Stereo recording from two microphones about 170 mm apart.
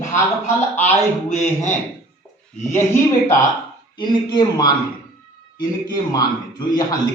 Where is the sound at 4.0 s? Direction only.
25° left (ahead or behind).